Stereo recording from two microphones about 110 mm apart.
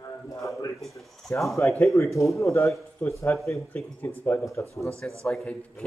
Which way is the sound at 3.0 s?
15° left (ahead or behind).